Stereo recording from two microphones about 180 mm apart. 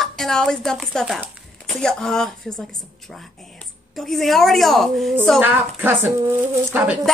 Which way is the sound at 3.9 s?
Centre (ahead or behind).